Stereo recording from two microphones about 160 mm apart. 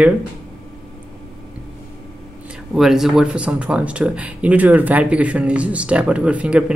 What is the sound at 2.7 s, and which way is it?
Speech, centre (ahead or behind).